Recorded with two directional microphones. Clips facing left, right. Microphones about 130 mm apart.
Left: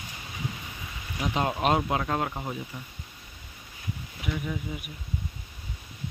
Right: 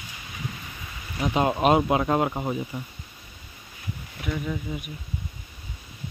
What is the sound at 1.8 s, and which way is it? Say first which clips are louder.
Speech: right 5 dB; 20° right (ahead or behind).